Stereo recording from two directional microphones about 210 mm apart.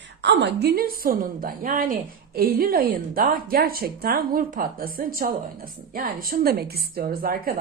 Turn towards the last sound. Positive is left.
turn(degrees=-45)  # may be behind; listen again after turning